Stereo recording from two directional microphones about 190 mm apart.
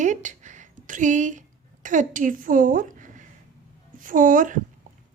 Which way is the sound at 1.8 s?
40° right (ahead or behind).